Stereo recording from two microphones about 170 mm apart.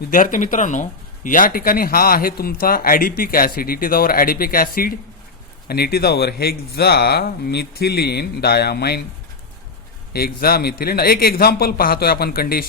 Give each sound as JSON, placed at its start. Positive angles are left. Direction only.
{"t": 0.1, "sound": "speech", "side_deg": 50}
{"t": 10.1, "sound": "speech", "side_deg": 65}